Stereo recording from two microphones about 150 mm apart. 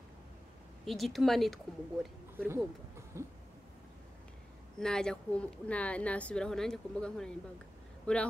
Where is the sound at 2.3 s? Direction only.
15° right (ahead or behind).